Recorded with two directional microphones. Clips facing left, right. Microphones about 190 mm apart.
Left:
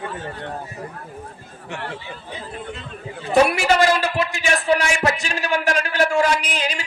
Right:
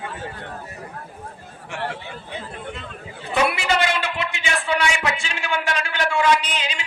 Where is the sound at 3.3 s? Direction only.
35° left (ahead or behind).